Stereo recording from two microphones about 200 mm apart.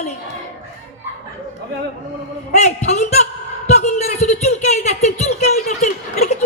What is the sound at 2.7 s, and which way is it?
A woman's voice, 35° left (ahead or behind).